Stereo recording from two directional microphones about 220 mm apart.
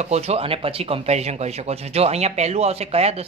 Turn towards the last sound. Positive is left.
turn(degrees=-30)  # may be behind; listen again after turning